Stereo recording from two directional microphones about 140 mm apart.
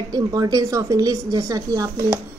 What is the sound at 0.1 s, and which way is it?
A woman's voice, 30° right (ahead or behind).